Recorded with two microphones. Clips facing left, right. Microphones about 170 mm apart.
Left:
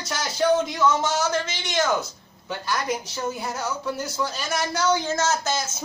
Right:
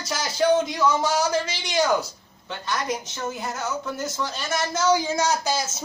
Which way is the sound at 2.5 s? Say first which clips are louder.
Left 1 dB; 5° left (ahead or behind).